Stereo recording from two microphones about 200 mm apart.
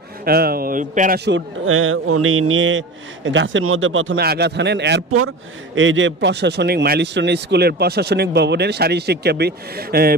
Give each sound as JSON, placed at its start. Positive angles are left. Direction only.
{"t": 0.2, "sound": "a man's voice", "side_deg": -50}
{"t": 1.2, "sound": "speech", "side_deg": -75}
{"t": 4.2, "sound": "speech", "side_deg": -55}